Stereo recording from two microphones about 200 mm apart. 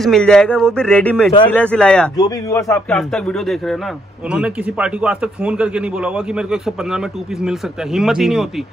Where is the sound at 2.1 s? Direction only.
20° left (ahead or behind).